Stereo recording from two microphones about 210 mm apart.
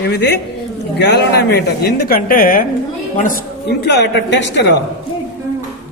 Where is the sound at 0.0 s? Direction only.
55° left (ahead or behind).